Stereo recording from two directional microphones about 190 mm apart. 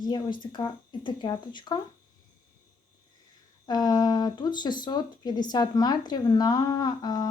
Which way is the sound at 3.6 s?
20° left (ahead or behind).